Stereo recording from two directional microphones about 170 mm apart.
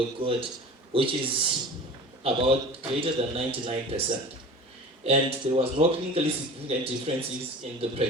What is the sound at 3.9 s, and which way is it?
Speech, 40° right (ahead or behind).